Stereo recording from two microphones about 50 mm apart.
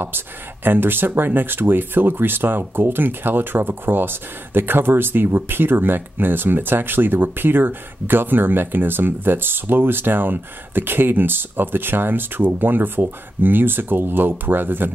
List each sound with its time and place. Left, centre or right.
0.7 s speech: right